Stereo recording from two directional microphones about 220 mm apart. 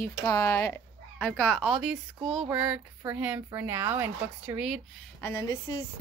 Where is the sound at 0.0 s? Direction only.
15° left (ahead or behind).